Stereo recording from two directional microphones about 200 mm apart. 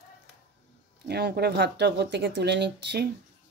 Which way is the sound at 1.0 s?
55° right (ahead or behind).